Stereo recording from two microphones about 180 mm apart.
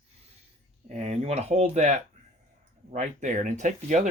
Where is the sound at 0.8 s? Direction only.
35° right (ahead or behind).